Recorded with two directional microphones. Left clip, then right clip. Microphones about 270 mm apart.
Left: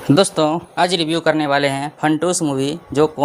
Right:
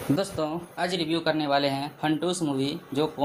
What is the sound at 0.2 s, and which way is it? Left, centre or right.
Speech, left.